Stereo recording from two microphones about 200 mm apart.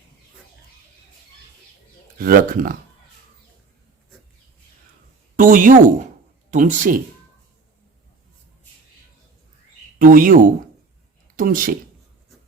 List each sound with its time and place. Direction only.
2.1 s speech: 45° right (ahead or behind)
5.4 s a woman's voice: 40° right (ahead or behind)
10.0 s speech: 45° right (ahead or behind)